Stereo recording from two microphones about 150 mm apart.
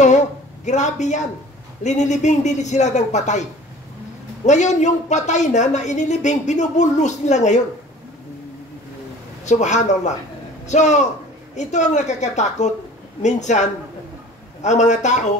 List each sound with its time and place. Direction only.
0.0 s a sound: 50° left (ahead or behind)
1.8 s a woman's voice: 50° left (ahead or behind)
4.5 s a woman's voice: 50° left (ahead or behind)
9.4 s a woman's voice: 50° left (ahead or behind)